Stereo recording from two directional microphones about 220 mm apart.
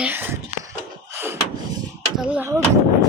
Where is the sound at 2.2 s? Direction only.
5° right (ahead or behind).